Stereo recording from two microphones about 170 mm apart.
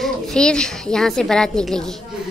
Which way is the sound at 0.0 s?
5° left (ahead or behind).